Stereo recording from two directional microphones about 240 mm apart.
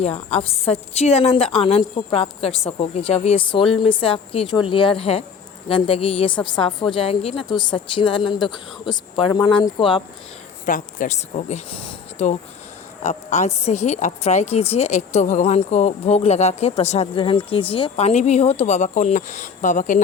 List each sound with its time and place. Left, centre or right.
0.0 s a woman's voice: left
10.7 s a woman's voice: left